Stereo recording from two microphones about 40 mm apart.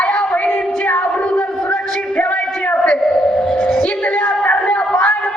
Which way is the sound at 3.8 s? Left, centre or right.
Left.